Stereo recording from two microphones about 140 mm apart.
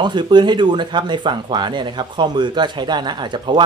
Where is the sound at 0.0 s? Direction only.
35° right (ahead or behind).